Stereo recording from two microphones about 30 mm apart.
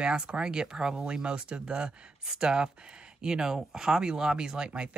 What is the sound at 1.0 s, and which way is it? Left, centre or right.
Speech, right.